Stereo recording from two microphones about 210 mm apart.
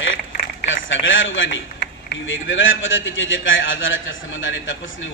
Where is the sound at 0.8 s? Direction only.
65° left (ahead or behind).